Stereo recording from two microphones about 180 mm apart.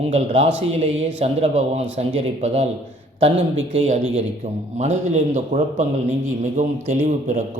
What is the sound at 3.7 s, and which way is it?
A man's voice, 35° right (ahead or behind).